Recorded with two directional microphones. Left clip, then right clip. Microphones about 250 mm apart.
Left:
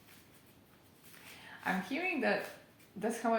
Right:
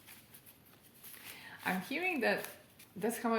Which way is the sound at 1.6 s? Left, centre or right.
Right.